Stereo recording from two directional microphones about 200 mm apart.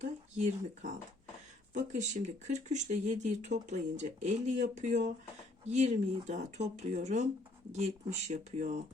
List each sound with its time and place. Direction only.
0.3 s speech: 35° right (ahead or behind)